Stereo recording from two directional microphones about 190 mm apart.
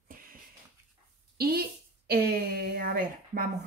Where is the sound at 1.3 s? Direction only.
55° right (ahead or behind).